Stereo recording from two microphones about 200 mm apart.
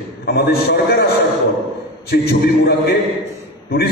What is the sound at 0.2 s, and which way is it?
Speech, 50° left (ahead or behind).